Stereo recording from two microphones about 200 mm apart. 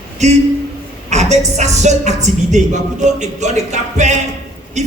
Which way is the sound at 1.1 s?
35° right (ahead or behind).